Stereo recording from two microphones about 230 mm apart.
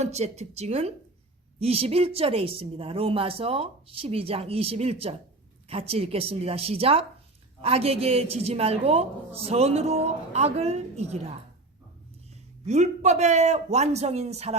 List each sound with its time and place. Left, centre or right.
0.0 s speech: right
12.6 s speech: right